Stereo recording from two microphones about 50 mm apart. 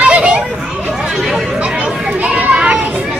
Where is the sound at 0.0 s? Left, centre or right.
Right.